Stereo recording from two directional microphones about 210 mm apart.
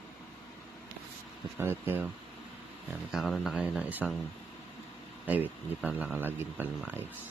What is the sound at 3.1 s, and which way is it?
Speech, centre (ahead or behind).